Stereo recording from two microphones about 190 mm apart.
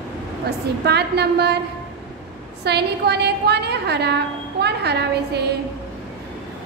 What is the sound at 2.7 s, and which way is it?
A woman's voice, 60° right (ahead or behind).